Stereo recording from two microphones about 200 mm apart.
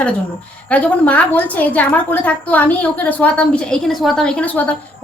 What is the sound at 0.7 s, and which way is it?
A woman's voice, 5° left (ahead or behind).